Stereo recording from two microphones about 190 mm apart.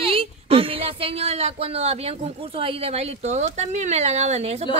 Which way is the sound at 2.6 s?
35° right (ahead or behind).